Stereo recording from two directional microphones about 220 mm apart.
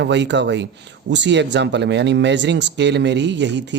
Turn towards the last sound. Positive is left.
turn(degrees=-50)  # may be behind; listen again after turning